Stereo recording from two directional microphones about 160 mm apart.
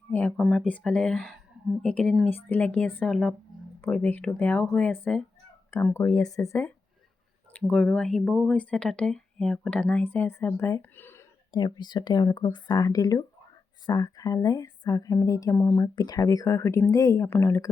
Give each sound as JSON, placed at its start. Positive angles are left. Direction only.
{"t": 0.1, "sound": "speech", "side_deg": 10}
{"t": 7.5, "sound": "speech", "side_deg": 5}
{"t": 11.5, "sound": "speech", "side_deg": 25}